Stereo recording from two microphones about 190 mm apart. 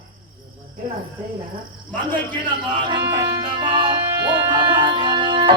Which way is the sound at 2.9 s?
25° right (ahead or behind).